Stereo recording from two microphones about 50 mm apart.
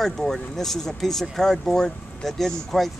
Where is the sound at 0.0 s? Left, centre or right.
Centre.